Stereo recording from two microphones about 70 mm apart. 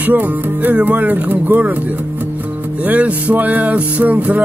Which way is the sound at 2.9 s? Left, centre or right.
Right.